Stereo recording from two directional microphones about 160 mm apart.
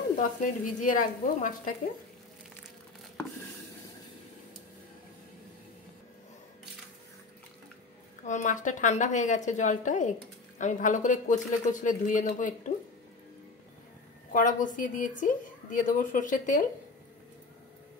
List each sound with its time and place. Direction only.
0.1 s a woman's voice: 50° left (ahead or behind)
8.3 s speech: 50° left (ahead or behind)
14.3 s a woman's voice: 55° left (ahead or behind)